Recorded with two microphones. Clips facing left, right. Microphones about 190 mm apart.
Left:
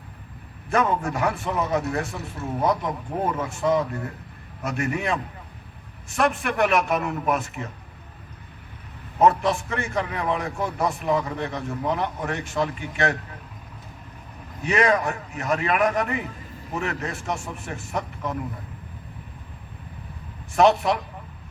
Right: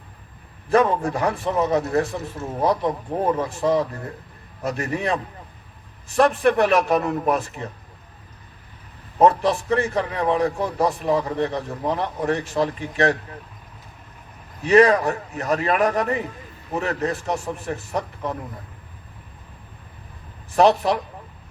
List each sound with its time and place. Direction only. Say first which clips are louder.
0.7 s a man's voice: right 4 dB; 35° right (ahead or behind)
3.3 s a man's voice: right 2 dB; 35° right (ahead or behind)
9.1 s a man's voice: right 2 dB; 35° right (ahead or behind)
14.6 s a man's voice: right 6 dB; 35° right (ahead or behind)
20.6 s a man's voice: right 2 dB; 35° right (ahead or behind)